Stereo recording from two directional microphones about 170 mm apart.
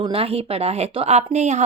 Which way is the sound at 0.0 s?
35° right (ahead or behind).